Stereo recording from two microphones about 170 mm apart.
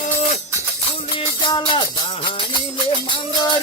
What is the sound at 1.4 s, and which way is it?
Music, 30° left (ahead or behind).